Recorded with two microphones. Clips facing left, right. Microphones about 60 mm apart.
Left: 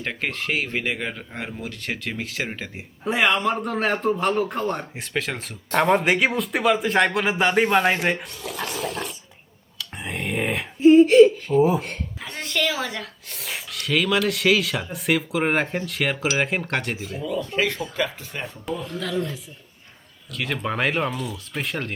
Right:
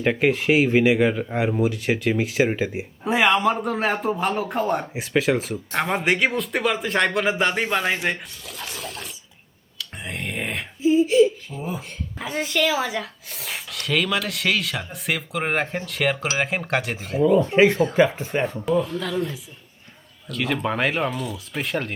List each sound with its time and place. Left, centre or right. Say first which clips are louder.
0.0 s speech: right 8 dB; centre
3.0 s speech: right 2 dB; centre
8.0 s a sound: left 2 dB; centre
10.8 s speech: left 5 dB; left
12.2 s speech: right 3 dB; centre
17.0 s speech: right 9 dB; right
17.5 s speech: right 8 dB; right
18.8 s speech: right 3 dB; centre